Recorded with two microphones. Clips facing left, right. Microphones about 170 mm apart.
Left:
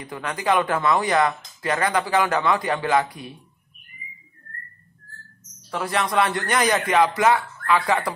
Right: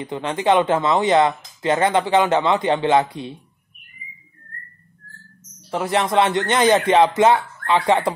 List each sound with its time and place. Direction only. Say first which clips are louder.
0.0 s speech: right 5 dB; 25° right (ahead or behind)
5.7 s speech: right 4 dB; 25° right (ahead or behind)